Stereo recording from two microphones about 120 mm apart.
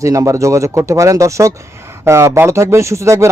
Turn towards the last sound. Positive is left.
turn(degrees=-25)  # may be behind; listen again after turning